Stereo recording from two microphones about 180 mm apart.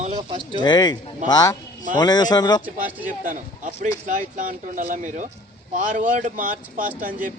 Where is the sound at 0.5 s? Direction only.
25° left (ahead or behind).